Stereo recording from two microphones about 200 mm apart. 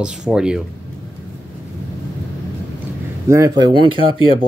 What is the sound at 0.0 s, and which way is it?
Speech, 5° right (ahead or behind).